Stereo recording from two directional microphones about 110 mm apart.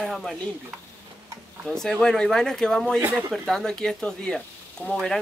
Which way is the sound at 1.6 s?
5° left (ahead or behind).